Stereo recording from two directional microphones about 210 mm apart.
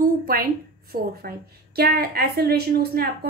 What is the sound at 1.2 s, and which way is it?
A woman's voice, 45° right (ahead or behind).